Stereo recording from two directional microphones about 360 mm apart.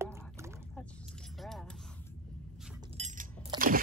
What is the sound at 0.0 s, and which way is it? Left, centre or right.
Rowboat, centre.